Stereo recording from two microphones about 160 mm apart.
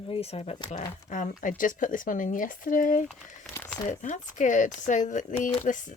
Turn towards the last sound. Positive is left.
turn(degrees=55)  # may be behind; listen again after turning